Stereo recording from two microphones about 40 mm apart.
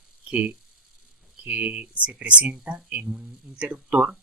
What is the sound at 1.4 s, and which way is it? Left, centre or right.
Speech, right.